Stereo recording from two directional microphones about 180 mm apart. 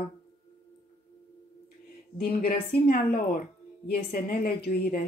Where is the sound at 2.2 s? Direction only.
60° left (ahead or behind).